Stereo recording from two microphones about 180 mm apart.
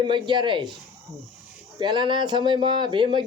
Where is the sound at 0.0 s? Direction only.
25° right (ahead or behind).